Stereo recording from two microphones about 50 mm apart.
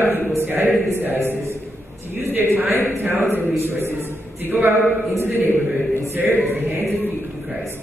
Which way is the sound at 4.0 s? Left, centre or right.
Right.